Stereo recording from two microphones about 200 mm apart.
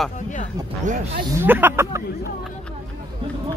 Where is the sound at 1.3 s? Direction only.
10° right (ahead or behind).